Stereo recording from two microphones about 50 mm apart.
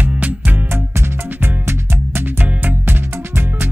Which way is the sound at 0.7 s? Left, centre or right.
Right.